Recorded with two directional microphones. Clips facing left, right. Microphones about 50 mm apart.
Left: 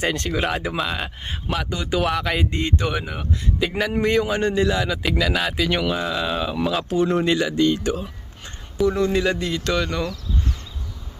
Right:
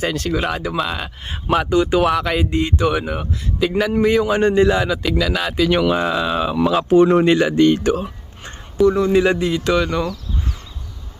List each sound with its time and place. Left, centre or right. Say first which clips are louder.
0.0 s speech: right 2 dB; centre
1.5 s speech: right 9 dB; right
2.0 s speech: right 4 dB; centre
4.3 s speech: right 6 dB; right
5.2 s speech: right 2 dB; centre
6.1 s speech: right 5 dB; centre
7.0 s speech: right 6 dB; right
8.7 s speech: right 5 dB; centre
9.2 s speech: right 5 dB; centre